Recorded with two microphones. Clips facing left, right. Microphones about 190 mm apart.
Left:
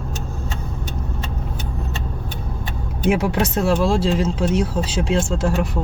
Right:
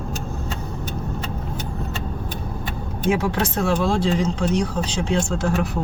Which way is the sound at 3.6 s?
Centre (ahead or behind).